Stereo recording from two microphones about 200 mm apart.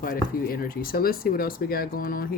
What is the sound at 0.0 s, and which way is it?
Speech, 45° left (ahead or behind).